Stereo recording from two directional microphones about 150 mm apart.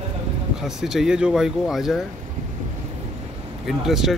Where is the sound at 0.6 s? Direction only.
5° right (ahead or behind).